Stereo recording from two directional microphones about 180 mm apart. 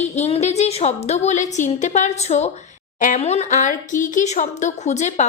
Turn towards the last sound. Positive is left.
turn(degrees=40)  # may be behind; listen again after turning